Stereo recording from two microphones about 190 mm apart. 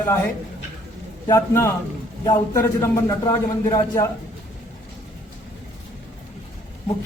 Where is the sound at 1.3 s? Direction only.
15° left (ahead or behind).